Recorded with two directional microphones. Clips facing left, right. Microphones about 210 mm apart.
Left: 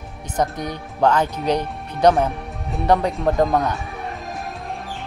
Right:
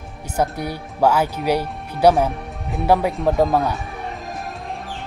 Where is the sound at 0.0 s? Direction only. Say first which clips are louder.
Right 1 dB; 5° right (ahead or behind).